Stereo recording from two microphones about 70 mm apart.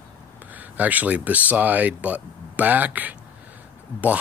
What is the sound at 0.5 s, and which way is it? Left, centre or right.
Speech, right.